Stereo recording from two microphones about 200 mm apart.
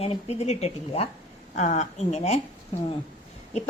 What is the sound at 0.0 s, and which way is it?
A woman's voice, 30° left (ahead or behind).